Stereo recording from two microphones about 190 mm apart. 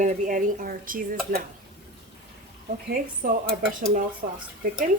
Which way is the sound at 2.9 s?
50° right (ahead or behind).